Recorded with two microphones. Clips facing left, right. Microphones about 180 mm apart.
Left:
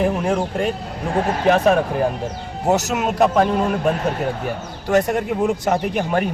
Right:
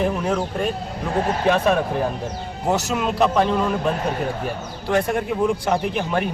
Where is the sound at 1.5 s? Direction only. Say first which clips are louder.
Left 4 dB; 45° left (ahead or behind).